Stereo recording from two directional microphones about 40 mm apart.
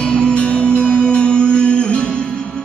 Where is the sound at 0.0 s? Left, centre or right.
Left.